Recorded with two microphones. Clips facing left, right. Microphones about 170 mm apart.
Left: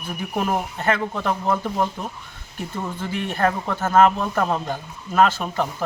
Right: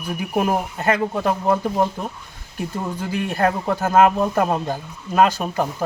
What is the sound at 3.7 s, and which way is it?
Speech, 10° right (ahead or behind).